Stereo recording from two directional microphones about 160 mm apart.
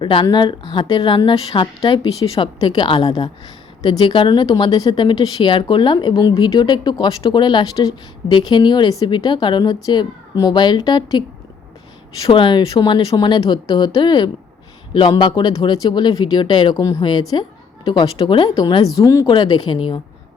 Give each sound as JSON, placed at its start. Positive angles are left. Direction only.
{"t": 0.0, "sound": "a woman's voice", "side_deg": 30}
{"t": 12.2, "sound": "a woman's voice", "side_deg": 30}